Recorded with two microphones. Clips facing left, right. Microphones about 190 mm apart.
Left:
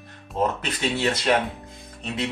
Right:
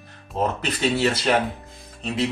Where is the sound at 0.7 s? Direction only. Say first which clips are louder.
Right 3 dB; 30° right (ahead or behind).